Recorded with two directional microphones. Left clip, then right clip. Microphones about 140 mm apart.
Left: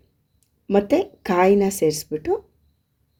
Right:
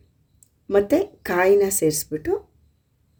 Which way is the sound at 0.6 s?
15° left (ahead or behind).